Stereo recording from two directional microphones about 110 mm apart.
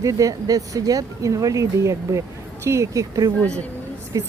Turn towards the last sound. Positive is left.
turn(degrees=-30)  # may be behind; listen again after turning